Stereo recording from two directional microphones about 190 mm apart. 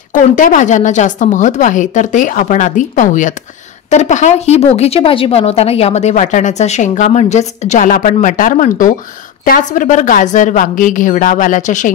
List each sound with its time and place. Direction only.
0.1 s a woman's voice: 45° left (ahead or behind)